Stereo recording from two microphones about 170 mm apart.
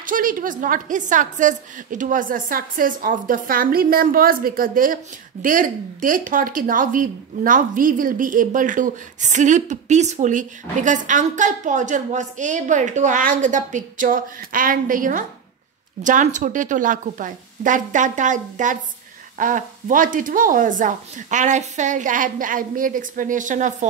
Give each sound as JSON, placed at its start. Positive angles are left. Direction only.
{"t": 0.0, "sound": "a woman's voice", "side_deg": -55}